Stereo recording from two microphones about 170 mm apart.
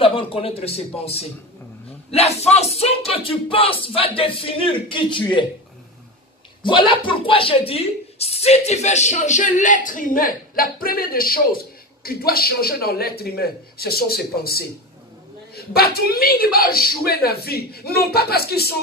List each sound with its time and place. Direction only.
0.0 s speech: 30° left (ahead or behind)
6.6 s speech: 30° left (ahead or behind); by 18.8 s 65° left (ahead or behind)